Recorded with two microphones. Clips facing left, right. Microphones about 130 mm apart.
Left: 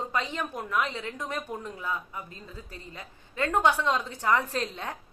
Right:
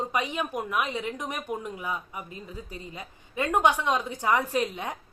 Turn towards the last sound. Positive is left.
turn(degrees=-15)  # may be behind; listen again after turning